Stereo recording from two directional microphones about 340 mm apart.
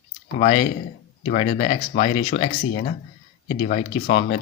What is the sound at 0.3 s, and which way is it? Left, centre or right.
Speech, centre.